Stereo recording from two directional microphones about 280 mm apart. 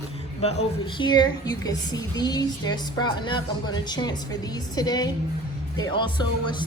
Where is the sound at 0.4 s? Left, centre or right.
Left.